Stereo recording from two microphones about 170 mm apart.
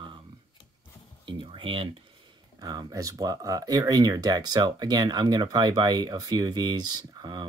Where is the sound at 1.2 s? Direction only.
30° right (ahead or behind).